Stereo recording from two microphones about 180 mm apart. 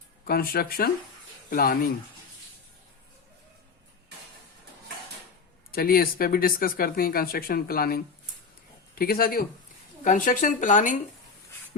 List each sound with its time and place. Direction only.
0.3 s speech: 55° left (ahead or behind)
5.7 s speech: 55° left (ahead or behind)
10.0 s speech: 45° left (ahead or behind)